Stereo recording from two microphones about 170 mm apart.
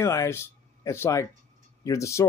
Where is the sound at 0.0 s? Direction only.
15° left (ahead or behind).